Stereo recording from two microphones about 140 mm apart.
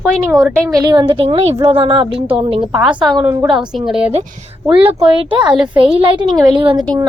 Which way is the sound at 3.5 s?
Centre (ahead or behind).